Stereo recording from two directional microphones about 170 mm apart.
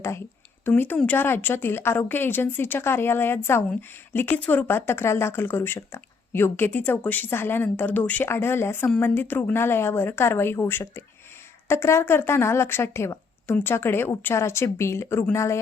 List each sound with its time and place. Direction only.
0.6 s speech: 10° left (ahead or behind)